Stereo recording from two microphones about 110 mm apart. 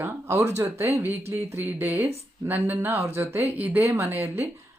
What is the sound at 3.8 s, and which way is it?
Speech, 25° right (ahead or behind).